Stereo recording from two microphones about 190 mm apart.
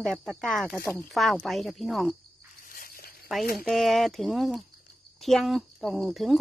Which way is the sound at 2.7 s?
50° left (ahead or behind).